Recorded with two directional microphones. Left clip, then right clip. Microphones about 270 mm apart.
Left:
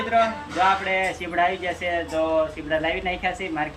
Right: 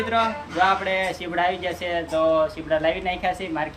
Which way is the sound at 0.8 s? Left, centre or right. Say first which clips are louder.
Even; centre.